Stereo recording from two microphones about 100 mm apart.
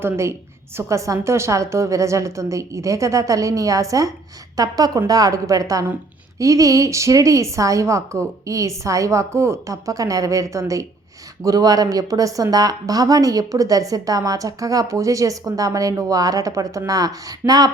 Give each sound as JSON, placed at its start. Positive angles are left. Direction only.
{"t": 0.0, "sound": "a woman's voice", "side_deg": -30}